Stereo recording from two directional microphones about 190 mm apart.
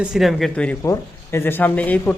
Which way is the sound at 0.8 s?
15° left (ahead or behind).